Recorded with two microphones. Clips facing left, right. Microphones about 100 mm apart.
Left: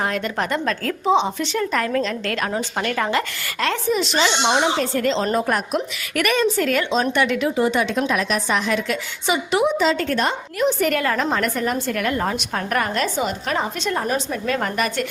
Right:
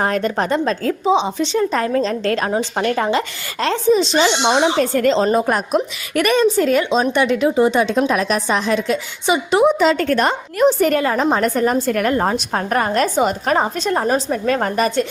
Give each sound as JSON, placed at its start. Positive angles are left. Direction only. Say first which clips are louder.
{"t": 0.0, "sound": "speech", "louder": "right 5 dB", "side_deg": -40}
{"t": 4.5, "sound": "a woman's voice", "louder": "right 4 dB", "side_deg": -45}
{"t": 5.2, "sound": "speech", "louder": "right 4 dB", "side_deg": -20}
{"t": 9.7, "sound": "a woman's voice", "louder": "right 4 dB", "side_deg": -55}
{"t": 11.0, "sound": "speech", "louder": "right 4 dB", "side_deg": -20}
{"t": 11.3, "sound": "a woman's voice", "louder": "right 5 dB", "side_deg": -35}
{"t": 13.0, "sound": "a woman's voice", "louder": "right 6 dB", "side_deg": -45}